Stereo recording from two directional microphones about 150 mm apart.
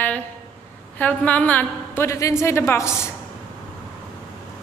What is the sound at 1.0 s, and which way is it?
A woman's voice, 10° left (ahead or behind).